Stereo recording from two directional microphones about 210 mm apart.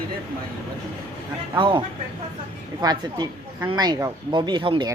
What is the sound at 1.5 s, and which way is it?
Speech, 25° right (ahead or behind).